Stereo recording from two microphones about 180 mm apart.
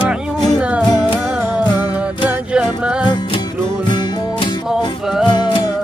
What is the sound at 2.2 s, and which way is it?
Music, 5° right (ahead or behind).